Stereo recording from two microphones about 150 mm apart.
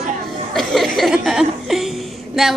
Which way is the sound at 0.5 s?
Centre (ahead or behind).